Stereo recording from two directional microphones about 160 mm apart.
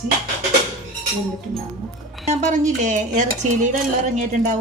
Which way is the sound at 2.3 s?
50° right (ahead or behind).